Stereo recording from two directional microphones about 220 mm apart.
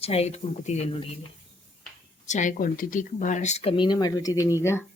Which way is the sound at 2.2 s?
35° left (ahead or behind).